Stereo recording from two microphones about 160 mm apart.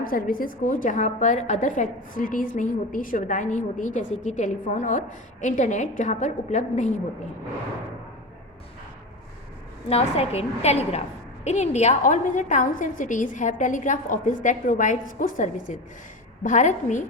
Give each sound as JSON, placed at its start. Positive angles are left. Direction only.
{"t": 0.0, "sound": "a woman's voice", "side_deg": 60}
{"t": 9.9, "sound": "a woman's voice", "side_deg": 40}